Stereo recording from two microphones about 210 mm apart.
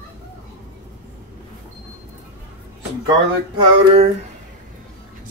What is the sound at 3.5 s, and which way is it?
Speech, 25° right (ahead or behind).